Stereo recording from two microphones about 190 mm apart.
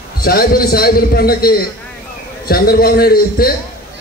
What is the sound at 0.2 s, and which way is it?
A man's voice, 50° left (ahead or behind).